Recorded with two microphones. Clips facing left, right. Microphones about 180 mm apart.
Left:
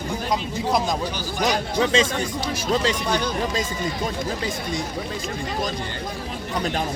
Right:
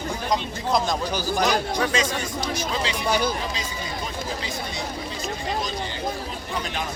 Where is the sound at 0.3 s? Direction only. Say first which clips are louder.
Left 1 dB; 10° left (ahead or behind).